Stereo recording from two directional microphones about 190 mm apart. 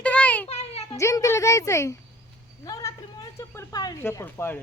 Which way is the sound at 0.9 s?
15° left (ahead or behind).